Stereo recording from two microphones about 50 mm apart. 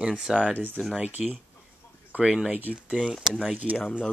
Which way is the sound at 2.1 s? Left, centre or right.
Centre.